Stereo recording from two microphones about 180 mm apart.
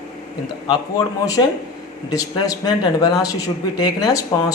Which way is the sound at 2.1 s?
20° left (ahead or behind).